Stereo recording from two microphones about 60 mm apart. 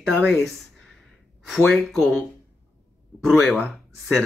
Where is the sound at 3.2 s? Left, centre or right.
Centre.